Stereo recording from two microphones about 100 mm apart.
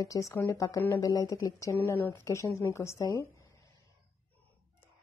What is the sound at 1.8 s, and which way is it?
A woman's voice, 20° left (ahead or behind).